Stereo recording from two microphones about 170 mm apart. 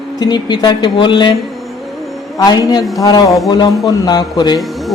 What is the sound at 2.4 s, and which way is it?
Speech, 20° left (ahead or behind).